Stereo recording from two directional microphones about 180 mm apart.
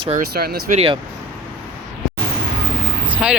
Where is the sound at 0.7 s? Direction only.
35° right (ahead or behind).